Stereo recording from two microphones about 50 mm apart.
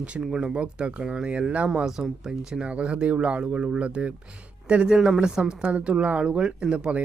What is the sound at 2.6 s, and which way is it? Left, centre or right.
Speech, right.